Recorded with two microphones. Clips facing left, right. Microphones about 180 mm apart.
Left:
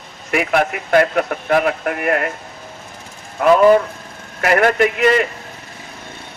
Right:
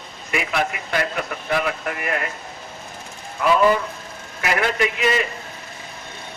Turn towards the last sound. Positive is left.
turn(degrees=60)  # may be behind; listen again after turning